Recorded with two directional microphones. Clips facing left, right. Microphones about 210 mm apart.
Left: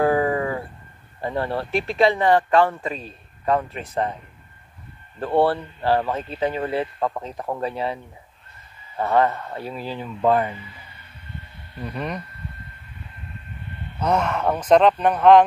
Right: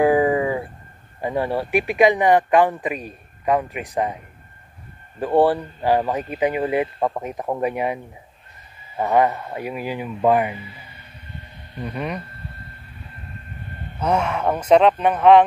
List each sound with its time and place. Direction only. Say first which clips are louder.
0.0 s a sound: right 3 dB; 15° right (ahead or behind)
1.2 s speech: right 3 dB; 10° right (ahead or behind)
5.2 s speech: right 3 dB; 15° right (ahead or behind)
11.9 s speech: right 1 dB; centre (ahead or behind)
13.6 s vehicle: even; 45° right (ahead or behind)
13.9 s speech: right 1 dB; 10° right (ahead or behind)